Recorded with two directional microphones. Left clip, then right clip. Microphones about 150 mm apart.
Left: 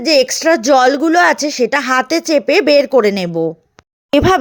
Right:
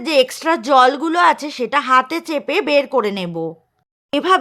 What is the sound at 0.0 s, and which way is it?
A woman's voice, 20° left (ahead or behind).